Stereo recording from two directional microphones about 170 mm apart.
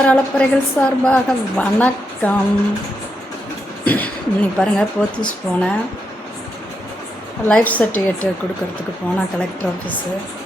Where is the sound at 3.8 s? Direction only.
10° left (ahead or behind).